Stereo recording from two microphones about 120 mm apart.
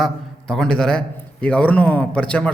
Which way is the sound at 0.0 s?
5° left (ahead or behind).